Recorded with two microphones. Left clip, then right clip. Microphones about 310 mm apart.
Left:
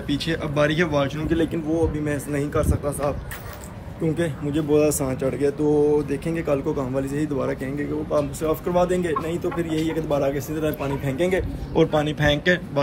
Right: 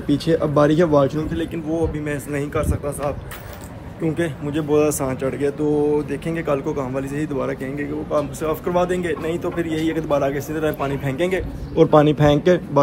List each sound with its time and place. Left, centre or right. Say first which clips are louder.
0.1 s a man's voice: right 7 dB; centre
1.3 s speech: left 3 dB; centre
1.7 s speech: even; centre
4.2 s a man's voice: right 1 dB; centre
12.1 s a man's voice: right 5 dB; centre